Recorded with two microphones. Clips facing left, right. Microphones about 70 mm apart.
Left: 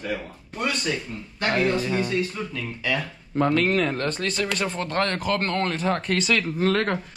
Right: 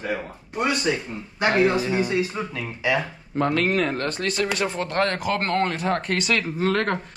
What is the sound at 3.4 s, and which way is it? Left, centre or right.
Speech, centre.